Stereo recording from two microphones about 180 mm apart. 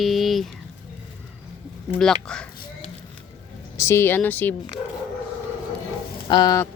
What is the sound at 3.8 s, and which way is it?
Speech, 15° left (ahead or behind).